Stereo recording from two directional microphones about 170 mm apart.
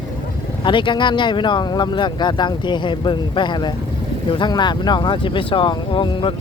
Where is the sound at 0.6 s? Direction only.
30° left (ahead or behind).